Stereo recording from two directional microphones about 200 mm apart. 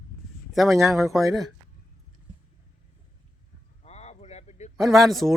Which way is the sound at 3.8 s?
35° left (ahead or behind).